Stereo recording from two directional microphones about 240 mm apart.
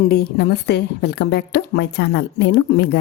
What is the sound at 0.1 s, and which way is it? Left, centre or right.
A woman's voice, left.